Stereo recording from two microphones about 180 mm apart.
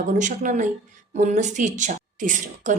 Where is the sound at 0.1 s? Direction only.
45° right (ahead or behind).